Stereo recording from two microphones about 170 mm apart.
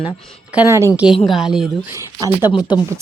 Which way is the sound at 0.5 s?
15° right (ahead or behind).